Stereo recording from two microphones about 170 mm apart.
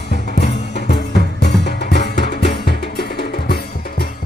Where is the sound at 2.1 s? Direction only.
45° left (ahead or behind).